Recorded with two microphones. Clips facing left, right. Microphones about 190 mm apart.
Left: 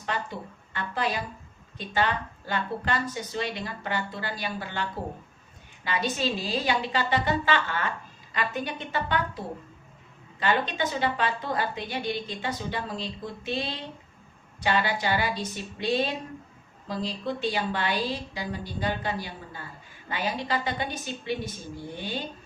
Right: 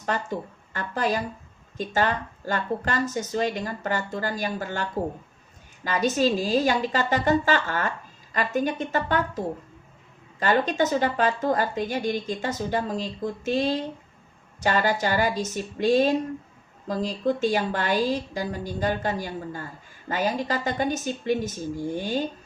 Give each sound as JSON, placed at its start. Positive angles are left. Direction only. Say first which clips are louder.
{"t": 0.0, "sound": "a woman's voice", "louder": "right 4 dB", "side_deg": -45}
{"t": 10.4, "sound": "a woman's voice", "louder": "right 4 dB", "side_deg": -45}